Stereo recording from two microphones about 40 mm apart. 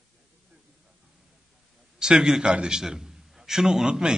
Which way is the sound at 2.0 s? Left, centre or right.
Centre.